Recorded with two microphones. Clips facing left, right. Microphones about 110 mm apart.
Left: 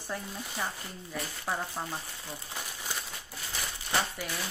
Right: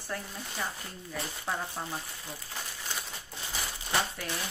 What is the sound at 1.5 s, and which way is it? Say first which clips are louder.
Speech: left 1 dB; 5° left (ahead or behind).